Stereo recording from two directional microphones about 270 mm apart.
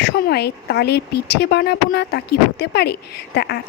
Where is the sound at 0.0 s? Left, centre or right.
Left.